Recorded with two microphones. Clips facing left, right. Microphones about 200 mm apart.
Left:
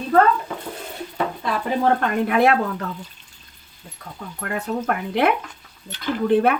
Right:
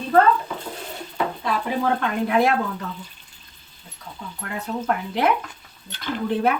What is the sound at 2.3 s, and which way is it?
Speech, 60° left (ahead or behind).